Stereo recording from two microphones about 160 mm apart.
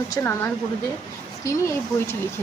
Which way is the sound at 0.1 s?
15° left (ahead or behind).